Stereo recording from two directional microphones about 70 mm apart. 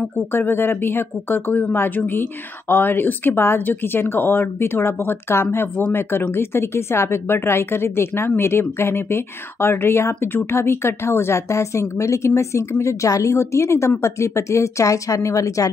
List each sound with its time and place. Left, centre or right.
0.3 s speech: left